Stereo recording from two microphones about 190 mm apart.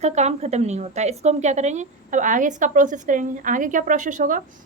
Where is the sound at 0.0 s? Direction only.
35° right (ahead or behind).